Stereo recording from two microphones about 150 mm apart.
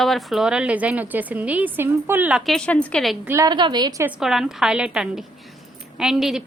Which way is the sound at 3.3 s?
20° right (ahead or behind).